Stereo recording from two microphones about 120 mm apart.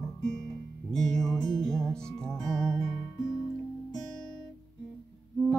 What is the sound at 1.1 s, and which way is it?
Music, 30° left (ahead or behind).